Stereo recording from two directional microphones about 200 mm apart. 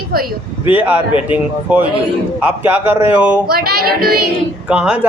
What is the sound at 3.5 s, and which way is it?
Speech, 50° right (ahead or behind).